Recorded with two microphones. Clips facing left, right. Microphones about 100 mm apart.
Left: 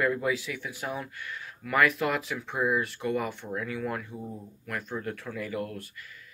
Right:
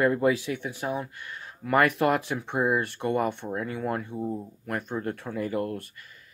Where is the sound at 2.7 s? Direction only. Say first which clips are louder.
Right 2 dB; 55° right (ahead or behind).